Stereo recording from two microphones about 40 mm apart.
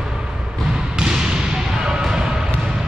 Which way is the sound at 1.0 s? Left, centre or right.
Centre.